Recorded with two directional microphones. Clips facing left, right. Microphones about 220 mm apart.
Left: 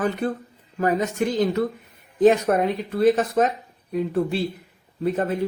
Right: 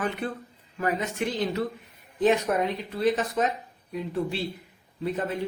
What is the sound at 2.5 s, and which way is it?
Speech, 55° left (ahead or behind).